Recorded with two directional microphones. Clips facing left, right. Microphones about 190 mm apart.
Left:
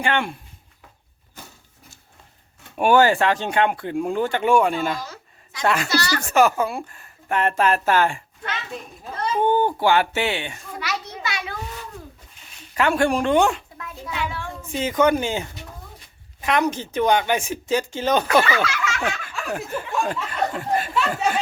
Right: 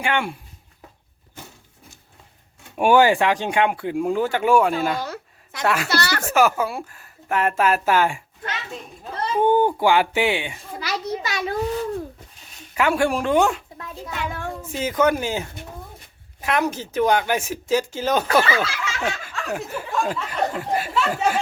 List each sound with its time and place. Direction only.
0.0 s speech: 10° right (ahead or behind)
2.7 s speech: 15° right (ahead or behind)
4.9 s a sound: 60° right (ahead or behind)
5.6 s speech: 5° right (ahead or behind)
5.9 s speech: 60° right (ahead or behind)
6.3 s speech: 5° right (ahead or behind)
10.8 s children playing: 35° right (ahead or behind)
12.7 s speech: 5° right (ahead or behind)
14.1 s a sound: 45° right (ahead or behind)
14.6 s speech: 5° right (ahead or behind)
18.4 s a sound: 30° right (ahead or behind)
18.9 s snicker: 10° left (ahead or behind)
19.5 s speech: centre (ahead or behind)